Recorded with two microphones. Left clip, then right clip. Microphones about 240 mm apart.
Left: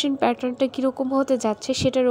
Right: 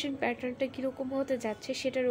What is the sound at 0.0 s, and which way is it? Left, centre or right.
Speech, left.